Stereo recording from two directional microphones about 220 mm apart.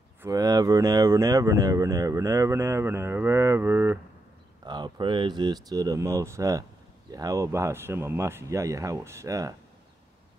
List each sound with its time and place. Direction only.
0.2 s speech: 15° right (ahead or behind)